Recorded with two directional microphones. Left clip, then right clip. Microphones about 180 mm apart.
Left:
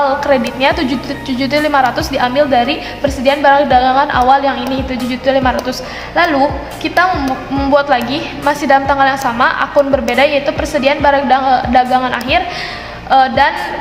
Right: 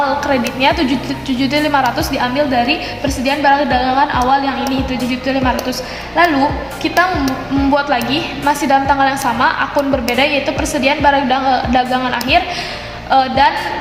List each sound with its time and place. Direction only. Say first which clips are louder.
0.3 s a woman's voice: left 2 dB; 25° left (ahead or behind)